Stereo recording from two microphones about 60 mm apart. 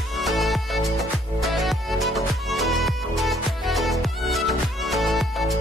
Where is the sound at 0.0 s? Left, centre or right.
Centre.